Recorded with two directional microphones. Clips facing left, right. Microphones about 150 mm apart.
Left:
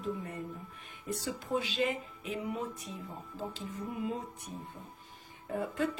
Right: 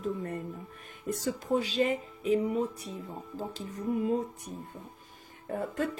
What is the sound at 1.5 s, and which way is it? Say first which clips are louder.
A woman's voice: right 4 dB; 40° right (ahead or behind).